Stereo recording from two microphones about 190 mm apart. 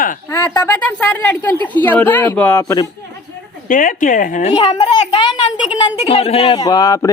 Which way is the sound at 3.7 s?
45° left (ahead or behind).